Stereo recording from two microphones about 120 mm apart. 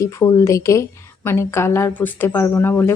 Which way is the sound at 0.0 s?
25° left (ahead or behind).